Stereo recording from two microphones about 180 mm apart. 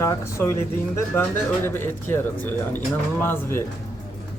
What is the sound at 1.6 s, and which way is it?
Speech, 10° left (ahead or behind).